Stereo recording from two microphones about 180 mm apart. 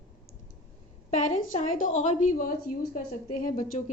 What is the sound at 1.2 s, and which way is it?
A woman's voice, 45° left (ahead or behind).